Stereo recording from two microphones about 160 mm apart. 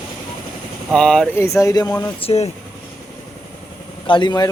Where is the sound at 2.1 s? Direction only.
40° left (ahead or behind).